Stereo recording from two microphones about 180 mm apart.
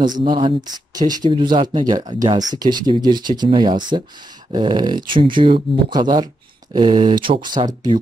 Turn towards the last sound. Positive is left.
turn(degrees=-25)  # may be behind; listen again after turning